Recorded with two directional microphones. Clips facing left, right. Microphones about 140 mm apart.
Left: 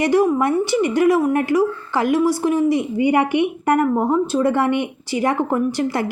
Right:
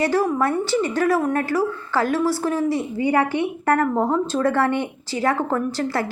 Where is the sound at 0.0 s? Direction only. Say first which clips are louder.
Left 4 dB; 15° left (ahead or behind).